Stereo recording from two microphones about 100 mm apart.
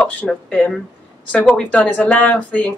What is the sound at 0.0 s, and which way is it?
Speech, 15° left (ahead or behind).